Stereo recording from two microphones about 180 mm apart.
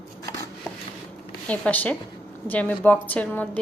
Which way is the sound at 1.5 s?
10° left (ahead or behind).